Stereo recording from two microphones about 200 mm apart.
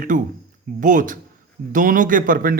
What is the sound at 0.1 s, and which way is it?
Speech, 40° right (ahead or behind).